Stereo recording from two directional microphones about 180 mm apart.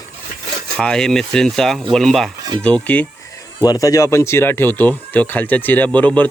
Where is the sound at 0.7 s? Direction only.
5° left (ahead or behind).